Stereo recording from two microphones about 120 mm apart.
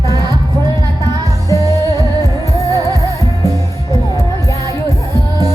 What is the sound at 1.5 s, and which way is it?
Music, 30° right (ahead or behind).